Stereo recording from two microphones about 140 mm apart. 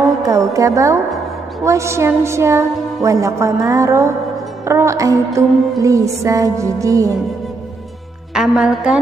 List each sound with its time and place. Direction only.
0.0 s music: 20° right (ahead or behind)
1.6 s a woman's voice: 20° right (ahead or behind)
8.3 s music: 5° right (ahead or behind)